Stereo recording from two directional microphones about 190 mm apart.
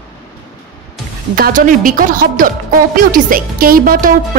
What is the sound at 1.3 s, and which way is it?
Speech, 45° right (ahead or behind).